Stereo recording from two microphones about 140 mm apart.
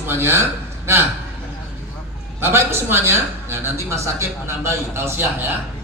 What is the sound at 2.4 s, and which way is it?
A man's voice, 20° right (ahead or behind).